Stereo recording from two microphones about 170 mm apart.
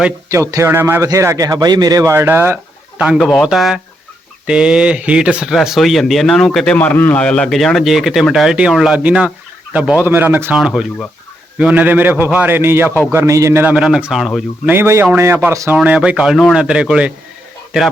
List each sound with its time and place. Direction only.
0.5 s a man's voice: 15° right (ahead or behind)
3.2 s a man's voice: 5° left (ahead or behind)
10.6 s a man's voice: centre (ahead or behind)
14.7 s a man's voice: 15° right (ahead or behind)